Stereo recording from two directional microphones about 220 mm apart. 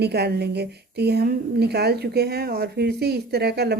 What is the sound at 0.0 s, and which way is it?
A woman's voice, 50° right (ahead or behind).